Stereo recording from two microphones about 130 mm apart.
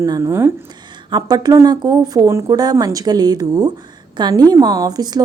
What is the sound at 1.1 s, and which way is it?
A woman's voice, 30° right (ahead or behind).